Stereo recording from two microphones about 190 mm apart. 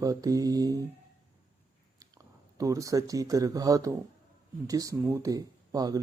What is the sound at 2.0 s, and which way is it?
Speech, 20° right (ahead or behind).